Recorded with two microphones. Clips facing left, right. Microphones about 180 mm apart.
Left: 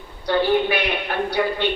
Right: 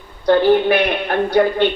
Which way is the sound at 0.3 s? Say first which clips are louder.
Right 6 dB; 50° right (ahead or behind).